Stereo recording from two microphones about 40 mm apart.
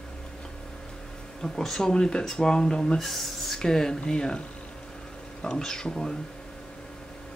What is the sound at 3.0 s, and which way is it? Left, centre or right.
Speech, centre.